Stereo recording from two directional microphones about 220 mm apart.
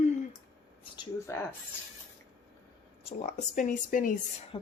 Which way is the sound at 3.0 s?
35° left (ahead or behind).